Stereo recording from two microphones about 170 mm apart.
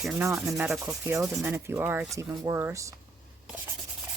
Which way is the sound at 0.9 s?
15° right (ahead or behind).